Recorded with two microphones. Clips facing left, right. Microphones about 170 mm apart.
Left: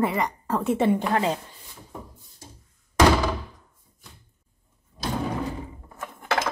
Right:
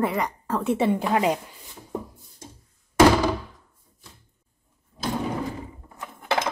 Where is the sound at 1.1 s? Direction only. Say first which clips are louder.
Right 2 dB; 15° right (ahead or behind).